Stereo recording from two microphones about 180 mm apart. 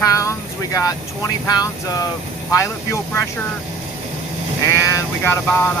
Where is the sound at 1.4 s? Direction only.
20° left (ahead or behind).